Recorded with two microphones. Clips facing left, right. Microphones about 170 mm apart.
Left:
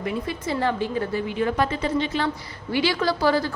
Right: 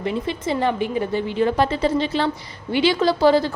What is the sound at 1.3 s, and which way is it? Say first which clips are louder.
A woman's voice: right 5 dB; 30° right (ahead or behind).